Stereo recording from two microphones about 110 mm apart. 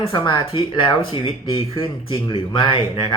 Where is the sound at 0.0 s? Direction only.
45° left (ahead or behind).